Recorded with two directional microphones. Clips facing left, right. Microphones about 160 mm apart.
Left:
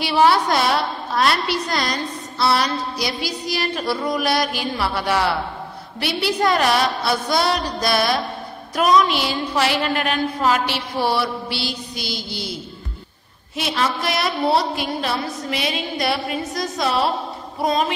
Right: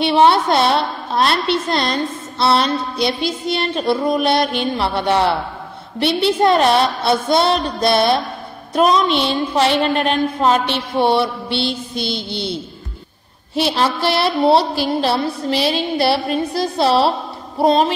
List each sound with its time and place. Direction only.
0.0 s a woman's voice: 25° right (ahead or behind)
13.6 s a sound: 30° right (ahead or behind)
17.6 s a woman's voice: 30° right (ahead or behind)